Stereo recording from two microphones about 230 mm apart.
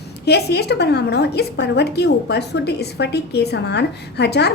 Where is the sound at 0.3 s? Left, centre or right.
Left.